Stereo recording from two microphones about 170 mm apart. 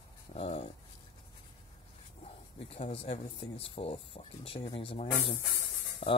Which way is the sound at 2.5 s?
35° left (ahead or behind).